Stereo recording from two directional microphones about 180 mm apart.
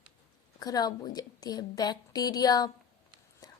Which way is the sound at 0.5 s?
20° left (ahead or behind).